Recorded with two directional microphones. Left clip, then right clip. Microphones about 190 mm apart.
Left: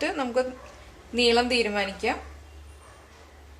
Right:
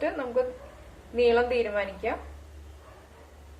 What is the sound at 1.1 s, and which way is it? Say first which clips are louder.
Speech: left 1 dB; 80° left.